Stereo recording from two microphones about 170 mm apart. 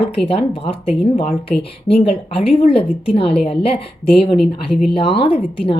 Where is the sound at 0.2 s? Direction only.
35° left (ahead or behind).